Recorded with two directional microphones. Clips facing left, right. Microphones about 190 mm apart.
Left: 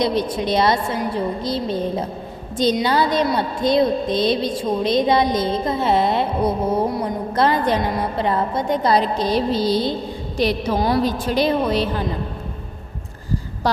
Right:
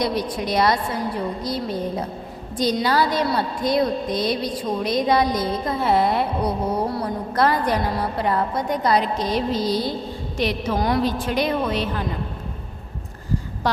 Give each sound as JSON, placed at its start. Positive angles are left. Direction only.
{"t": 0.0, "sound": "a woman's voice", "side_deg": 25}